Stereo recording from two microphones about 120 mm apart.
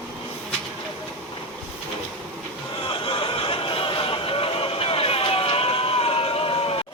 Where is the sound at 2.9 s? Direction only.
50° left (ahead or behind).